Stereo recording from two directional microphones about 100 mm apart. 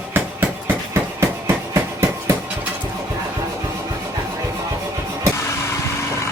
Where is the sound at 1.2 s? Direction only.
25° right (ahead or behind).